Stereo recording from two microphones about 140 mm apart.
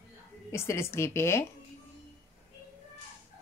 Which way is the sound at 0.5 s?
20° left (ahead or behind).